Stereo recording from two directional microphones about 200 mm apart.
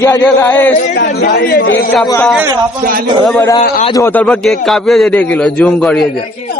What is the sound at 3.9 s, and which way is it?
A man's voice, 10° left (ahead or behind).